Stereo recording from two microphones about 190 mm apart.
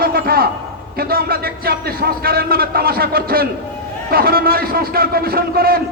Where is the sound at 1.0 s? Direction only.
50° right (ahead or behind).